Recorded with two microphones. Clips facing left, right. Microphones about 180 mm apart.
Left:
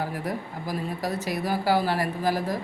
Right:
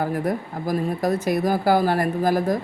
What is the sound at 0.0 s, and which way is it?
Speech, 50° right (ahead or behind).